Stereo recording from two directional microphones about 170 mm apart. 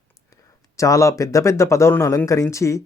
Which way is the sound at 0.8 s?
20° left (ahead or behind).